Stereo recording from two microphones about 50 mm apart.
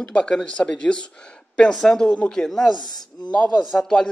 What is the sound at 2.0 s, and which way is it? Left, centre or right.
Speech, left.